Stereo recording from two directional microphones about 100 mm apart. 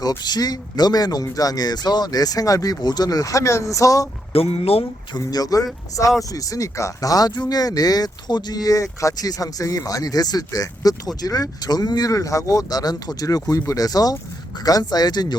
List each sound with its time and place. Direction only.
0.0 s speech: 40° left (ahead or behind)
4.3 s speech: 80° left
5.1 s speech: 40° left (ahead or behind)